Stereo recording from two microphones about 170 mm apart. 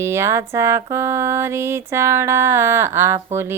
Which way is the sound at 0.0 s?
15° right (ahead or behind).